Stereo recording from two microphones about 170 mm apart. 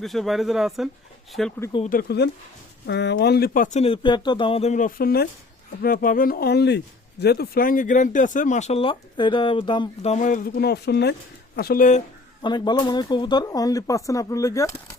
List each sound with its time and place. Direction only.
0.0 s speech: centre (ahead or behind)
1.9 s speech: 65° left (ahead or behind)
2.8 s speech: 90° left
11.5 s speech: 60° left (ahead or behind)
12.4 s speech: 25° left (ahead or behind)